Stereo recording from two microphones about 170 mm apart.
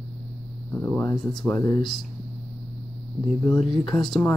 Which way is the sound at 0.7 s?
10° left (ahead or behind).